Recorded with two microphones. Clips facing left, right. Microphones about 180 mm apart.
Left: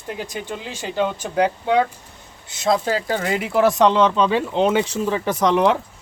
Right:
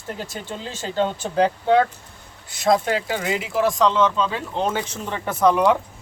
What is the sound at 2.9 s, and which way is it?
Speech, 40° left (ahead or behind).